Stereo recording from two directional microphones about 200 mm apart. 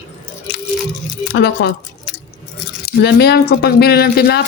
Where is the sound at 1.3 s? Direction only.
60° left (ahead or behind).